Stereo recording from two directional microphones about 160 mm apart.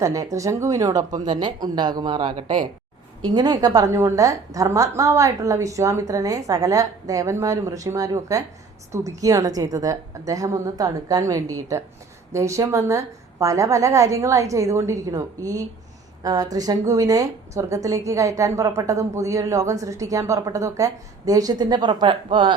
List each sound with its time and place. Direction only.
0.0 s speech: 20° right (ahead or behind)